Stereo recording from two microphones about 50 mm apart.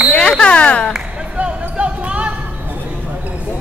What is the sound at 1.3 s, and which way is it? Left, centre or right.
Basketball bounce, right.